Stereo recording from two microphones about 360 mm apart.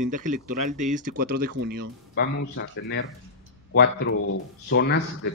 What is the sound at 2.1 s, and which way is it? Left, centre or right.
Speech, left.